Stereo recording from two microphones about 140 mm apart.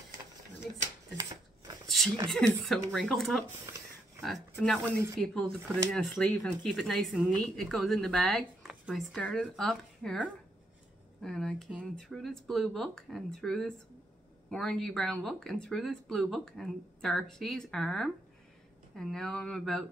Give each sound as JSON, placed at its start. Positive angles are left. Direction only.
{"t": 1.1, "sound": "scissors", "side_deg": -30}
{"t": 2.0, "sound": "a sound", "side_deg": 0}
{"t": 2.3, "sound": "speech", "side_deg": 5}